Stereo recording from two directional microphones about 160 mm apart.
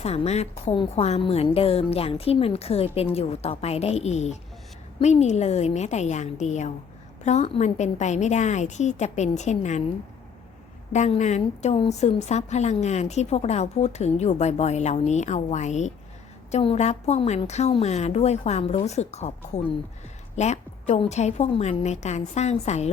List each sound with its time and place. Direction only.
0.0 s a woman's voice: 40° left (ahead or behind)
10.9 s a woman's voice: 45° left (ahead or behind)